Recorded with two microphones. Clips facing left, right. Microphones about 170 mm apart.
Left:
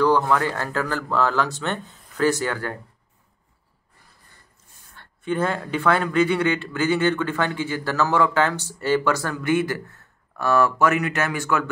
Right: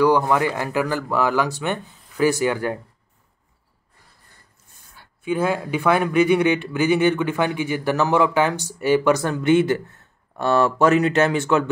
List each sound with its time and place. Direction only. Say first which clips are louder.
0.2 s a man's voice: right 2 dB; 15° right (ahead or behind)
4.9 s a man's voice: right 1 dB; 10° right (ahead or behind); by 11.7 s 25° right (ahead or behind)